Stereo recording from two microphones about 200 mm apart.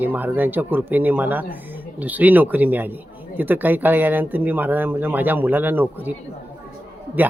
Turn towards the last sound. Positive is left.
turn(degrees=-10)  # may be behind; listen again after turning